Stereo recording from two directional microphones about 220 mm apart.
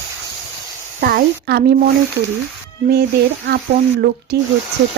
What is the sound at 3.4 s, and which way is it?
Speech, 45° right (ahead or behind).